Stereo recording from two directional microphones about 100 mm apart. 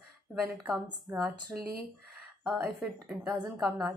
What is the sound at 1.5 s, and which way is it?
Speech, 15° right (ahead or behind).